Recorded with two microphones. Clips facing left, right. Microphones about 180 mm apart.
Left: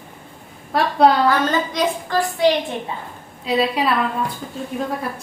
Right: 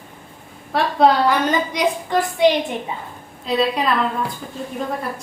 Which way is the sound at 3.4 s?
5° left (ahead or behind).